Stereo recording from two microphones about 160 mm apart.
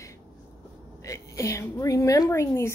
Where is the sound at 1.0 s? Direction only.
20° left (ahead or behind).